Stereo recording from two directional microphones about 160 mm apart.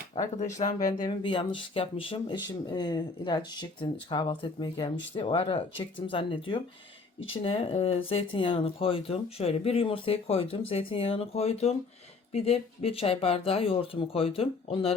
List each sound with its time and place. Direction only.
0.3 s speech: 50° left (ahead or behind)
0.9 s speech: 25° left (ahead or behind)